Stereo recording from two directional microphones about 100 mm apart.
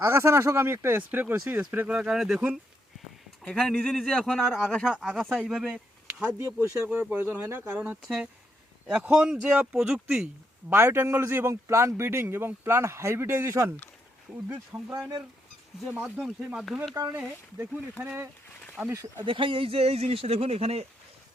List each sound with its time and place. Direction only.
0.0 s a man's voice: 25° right (ahead or behind); by 2.6 s 10° right (ahead or behind)
3.4 s speech: 10° left (ahead or behind)
6.2 s speech: 25° right (ahead or behind)
8.0 s a man's voice: centre (ahead or behind)
10.7 s speech: 25° right (ahead or behind)
14.4 s a man's voice: 20° right (ahead or behind)
16.2 s a man's voice: 5° right (ahead or behind)
16.9 s speech: 30° right (ahead or behind)
19.2 s speech: 55° right (ahead or behind); by 20.8 s 90° right